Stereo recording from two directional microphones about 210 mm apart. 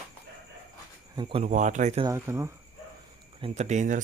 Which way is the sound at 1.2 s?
25° right (ahead or behind).